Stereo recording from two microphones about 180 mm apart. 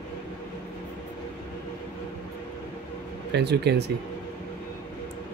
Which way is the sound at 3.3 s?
65° right (ahead or behind).